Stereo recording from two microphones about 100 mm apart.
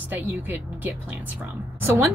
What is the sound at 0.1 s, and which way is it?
Speech, 20° right (ahead or behind).